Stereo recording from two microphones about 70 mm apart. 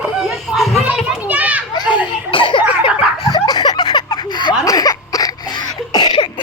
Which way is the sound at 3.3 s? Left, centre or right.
Left.